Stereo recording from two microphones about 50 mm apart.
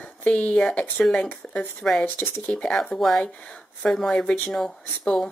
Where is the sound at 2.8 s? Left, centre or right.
Centre.